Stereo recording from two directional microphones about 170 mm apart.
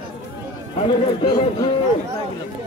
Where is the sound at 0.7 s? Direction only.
25° left (ahead or behind).